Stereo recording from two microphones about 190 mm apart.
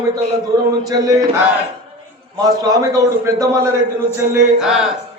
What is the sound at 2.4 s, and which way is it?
A man's voice, 20° right (ahead or behind).